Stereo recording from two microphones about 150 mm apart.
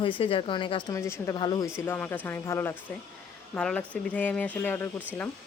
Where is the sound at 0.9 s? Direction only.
20° left (ahead or behind).